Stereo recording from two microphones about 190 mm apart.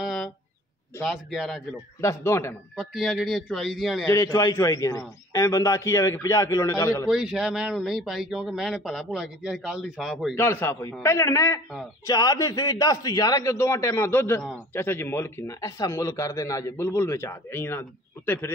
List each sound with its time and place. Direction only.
0.0 s a sound: centre (ahead or behind)
1.0 s speech: centre (ahead or behind)
2.0 s speech: 15° left (ahead or behind)
2.7 s speech: centre (ahead or behind)
4.1 s speech: 15° left (ahead or behind)
7.1 s speech: centre (ahead or behind)
10.3 s speech: 10° left (ahead or behind)